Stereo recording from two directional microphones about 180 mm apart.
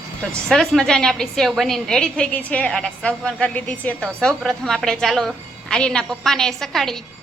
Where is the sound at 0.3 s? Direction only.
5° left (ahead or behind).